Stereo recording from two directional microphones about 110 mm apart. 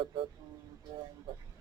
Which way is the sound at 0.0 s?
55° right (ahead or behind).